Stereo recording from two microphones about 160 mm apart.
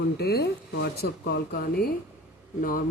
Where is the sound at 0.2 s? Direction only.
80° left.